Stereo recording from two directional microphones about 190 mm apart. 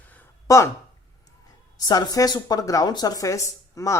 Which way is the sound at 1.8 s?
20° left (ahead or behind).